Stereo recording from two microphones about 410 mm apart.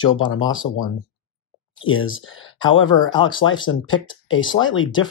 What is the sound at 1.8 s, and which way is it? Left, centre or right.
Speech, left.